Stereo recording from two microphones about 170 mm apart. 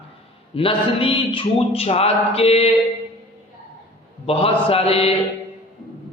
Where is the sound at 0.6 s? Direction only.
30° left (ahead or behind).